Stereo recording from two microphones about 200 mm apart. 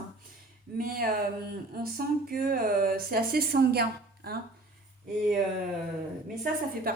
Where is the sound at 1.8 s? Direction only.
50° right (ahead or behind).